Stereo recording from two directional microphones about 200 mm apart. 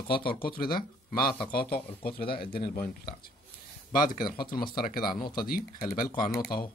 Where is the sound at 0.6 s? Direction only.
45° left (ahead or behind).